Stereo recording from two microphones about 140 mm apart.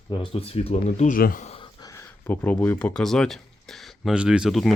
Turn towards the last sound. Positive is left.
turn(degrees=0)  # may be behind; listen again after turning